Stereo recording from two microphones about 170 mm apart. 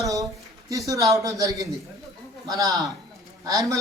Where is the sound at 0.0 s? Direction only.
20° right (ahead or behind).